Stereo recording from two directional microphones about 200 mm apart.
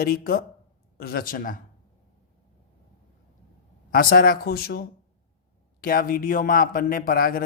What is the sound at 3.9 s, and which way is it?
Speech, 45° left (ahead or behind).